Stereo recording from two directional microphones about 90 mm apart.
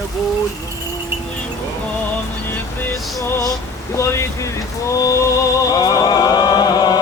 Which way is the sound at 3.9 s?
35° left (ahead or behind).